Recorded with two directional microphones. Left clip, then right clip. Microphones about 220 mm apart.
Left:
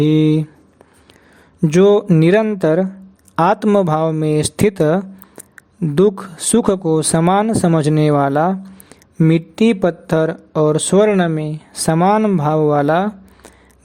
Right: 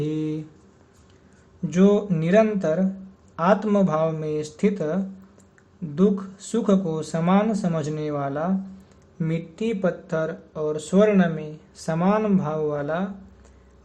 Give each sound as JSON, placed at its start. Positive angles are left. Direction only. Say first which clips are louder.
{"t": 0.0, "sound": "speech", "louder": "left 13 dB", "side_deg": 50}
{"t": 1.6, "sound": "speech", "louder": "left 9 dB", "side_deg": 50}